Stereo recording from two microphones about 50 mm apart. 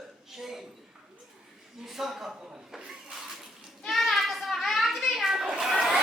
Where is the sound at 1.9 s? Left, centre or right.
Centre.